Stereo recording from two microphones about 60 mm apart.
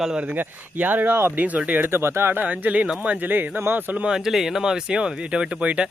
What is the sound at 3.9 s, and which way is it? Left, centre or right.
Speech, centre.